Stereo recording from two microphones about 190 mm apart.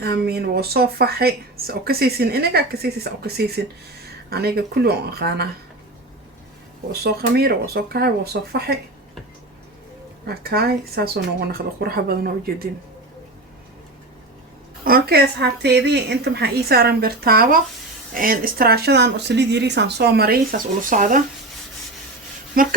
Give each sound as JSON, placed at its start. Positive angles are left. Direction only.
{"t": 0.0, "sound": "speech", "side_deg": -55}
{"t": 6.9, "sound": "speech", "side_deg": -55}
{"t": 10.2, "sound": "speech", "side_deg": -55}
{"t": 14.8, "sound": "speech", "side_deg": -55}
{"t": 22.5, "sound": "speech", "side_deg": -50}